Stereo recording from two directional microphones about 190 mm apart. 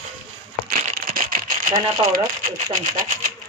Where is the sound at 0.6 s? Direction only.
50° right (ahead or behind).